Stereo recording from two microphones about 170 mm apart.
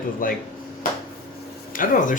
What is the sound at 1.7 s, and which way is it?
Speech, 50° left (ahead or behind).